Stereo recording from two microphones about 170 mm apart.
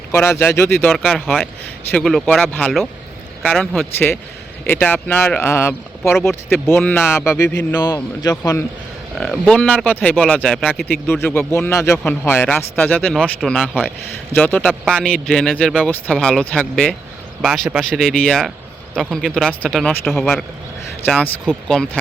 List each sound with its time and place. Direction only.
0.1 s speech: 15° left (ahead or behind)
9.1 s speech: centre (ahead or behind)